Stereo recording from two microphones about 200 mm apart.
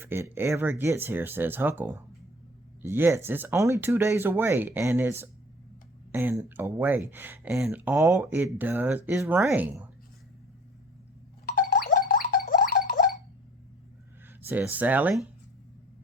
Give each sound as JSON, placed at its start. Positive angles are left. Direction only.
{"t": 0.0, "sound": "speech", "side_deg": -10}
{"t": 11.4, "sound": "a sound", "side_deg": 45}
{"t": 14.4, "sound": "speech", "side_deg": -10}